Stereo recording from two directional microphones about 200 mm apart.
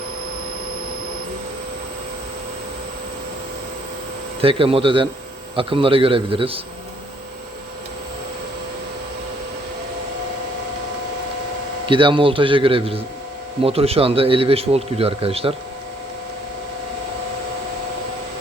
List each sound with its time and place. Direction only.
4.4 s speech: 25° right (ahead or behind)
11.9 s speech: 25° right (ahead or behind)